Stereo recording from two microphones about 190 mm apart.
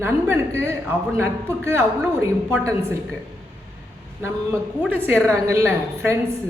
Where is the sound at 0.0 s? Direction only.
15° right (ahead or behind).